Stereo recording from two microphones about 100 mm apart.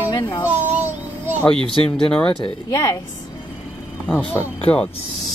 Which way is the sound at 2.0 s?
10° left (ahead or behind).